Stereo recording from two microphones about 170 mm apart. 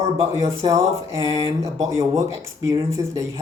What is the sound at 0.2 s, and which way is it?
Speech, 20° right (ahead or behind).